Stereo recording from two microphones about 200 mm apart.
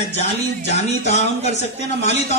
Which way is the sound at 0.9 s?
35° left (ahead or behind).